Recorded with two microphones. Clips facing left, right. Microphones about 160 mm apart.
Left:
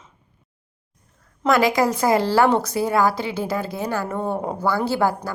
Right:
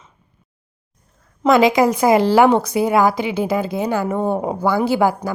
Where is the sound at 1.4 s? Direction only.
20° right (ahead or behind).